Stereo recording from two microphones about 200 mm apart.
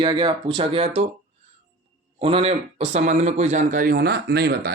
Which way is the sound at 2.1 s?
30° right (ahead or behind).